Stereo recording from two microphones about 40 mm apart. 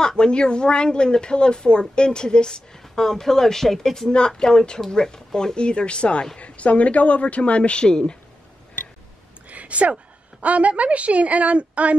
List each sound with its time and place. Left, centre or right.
0.0 s speech: centre
3.1 s speech: centre
4.4 s a man's voice: centre
9.5 s a sound: right
10.4 s a woman's voice: right